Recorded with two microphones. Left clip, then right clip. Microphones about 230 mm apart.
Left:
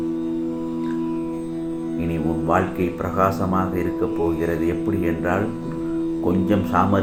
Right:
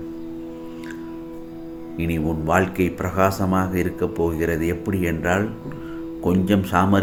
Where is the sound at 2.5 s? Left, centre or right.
Right.